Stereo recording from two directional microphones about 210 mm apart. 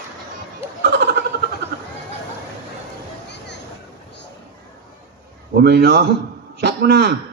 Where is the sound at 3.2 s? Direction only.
55° left (ahead or behind).